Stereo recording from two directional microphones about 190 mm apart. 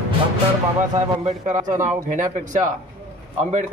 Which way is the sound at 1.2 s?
40° right (ahead or behind).